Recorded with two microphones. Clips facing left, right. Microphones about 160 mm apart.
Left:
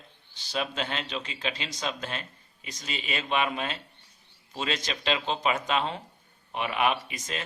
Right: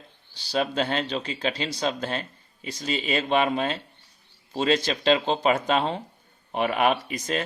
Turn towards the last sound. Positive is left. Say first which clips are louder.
# right 7 dB
turn(degrees=-40)  # may be behind; listen again after turning